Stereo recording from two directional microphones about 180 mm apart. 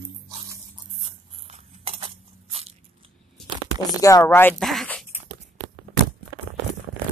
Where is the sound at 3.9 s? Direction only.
20° left (ahead or behind).